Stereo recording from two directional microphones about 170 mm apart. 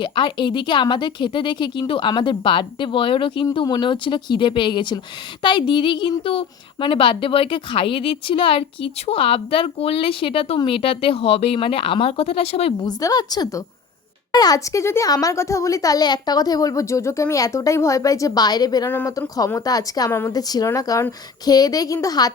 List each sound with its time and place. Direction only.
0.0 s a child's voice: 30° left (ahead or behind)
12.8 s a child's voice: 20° left (ahead or behind)